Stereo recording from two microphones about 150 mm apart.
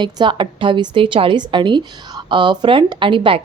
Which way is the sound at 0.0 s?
30° right (ahead or behind).